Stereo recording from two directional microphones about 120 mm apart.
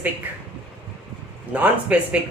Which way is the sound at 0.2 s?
15° right (ahead or behind).